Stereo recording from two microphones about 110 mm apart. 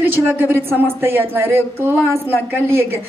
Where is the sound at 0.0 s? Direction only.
15° right (ahead or behind).